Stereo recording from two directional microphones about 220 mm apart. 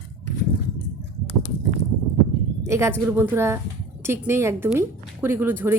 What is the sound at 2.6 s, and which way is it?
Speech, 10° right (ahead or behind).